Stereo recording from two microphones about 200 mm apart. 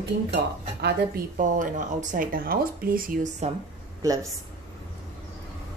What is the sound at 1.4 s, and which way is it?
Speech, 40° right (ahead or behind).